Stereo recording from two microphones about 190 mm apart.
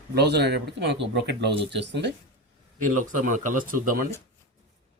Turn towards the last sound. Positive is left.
turn(degrees=-45)  # may be behind; listen again after turning